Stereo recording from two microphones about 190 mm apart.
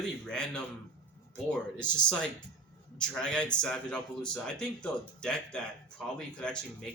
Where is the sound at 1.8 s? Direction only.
5° left (ahead or behind).